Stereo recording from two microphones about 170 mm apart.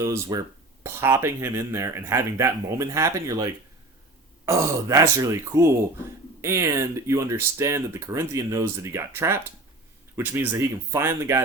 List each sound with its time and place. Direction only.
0.0 s speech: 20° right (ahead or behind)